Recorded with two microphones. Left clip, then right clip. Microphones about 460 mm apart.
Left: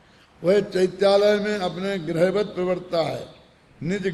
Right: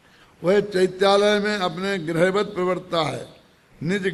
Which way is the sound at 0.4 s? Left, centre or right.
Right.